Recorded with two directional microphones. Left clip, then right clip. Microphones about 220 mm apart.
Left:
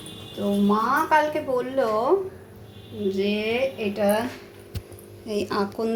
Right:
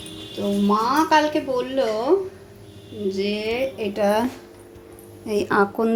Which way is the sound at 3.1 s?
5° right (ahead or behind).